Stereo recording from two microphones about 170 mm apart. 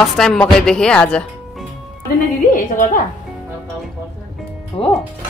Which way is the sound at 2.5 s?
50° left (ahead or behind).